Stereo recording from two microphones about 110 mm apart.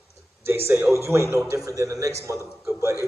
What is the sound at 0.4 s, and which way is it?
A man's voice, 20° right (ahead or behind).